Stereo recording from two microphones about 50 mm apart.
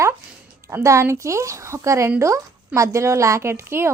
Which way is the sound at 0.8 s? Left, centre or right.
Right.